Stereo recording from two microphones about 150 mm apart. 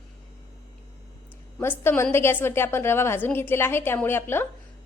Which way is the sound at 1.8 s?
15° left (ahead or behind).